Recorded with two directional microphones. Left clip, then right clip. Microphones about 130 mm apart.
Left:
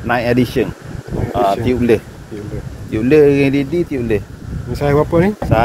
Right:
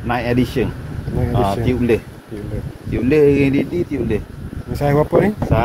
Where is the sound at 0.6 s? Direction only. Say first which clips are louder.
Left 3 dB; 90° left.